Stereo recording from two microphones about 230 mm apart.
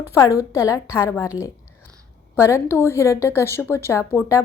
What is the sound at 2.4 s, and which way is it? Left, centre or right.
A woman's voice, centre.